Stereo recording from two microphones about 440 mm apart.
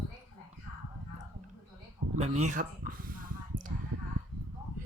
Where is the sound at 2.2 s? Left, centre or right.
Centre.